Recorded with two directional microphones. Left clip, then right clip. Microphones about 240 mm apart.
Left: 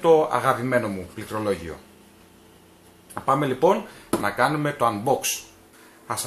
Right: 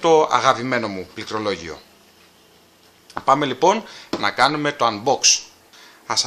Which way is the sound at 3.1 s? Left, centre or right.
Right.